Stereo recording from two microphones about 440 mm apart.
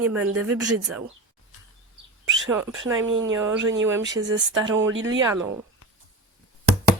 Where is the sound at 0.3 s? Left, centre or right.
Right.